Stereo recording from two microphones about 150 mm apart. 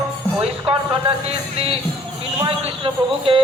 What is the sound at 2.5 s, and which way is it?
Speech, 35° right (ahead or behind).